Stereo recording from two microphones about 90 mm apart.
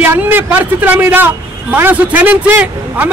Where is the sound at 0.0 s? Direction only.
20° right (ahead or behind).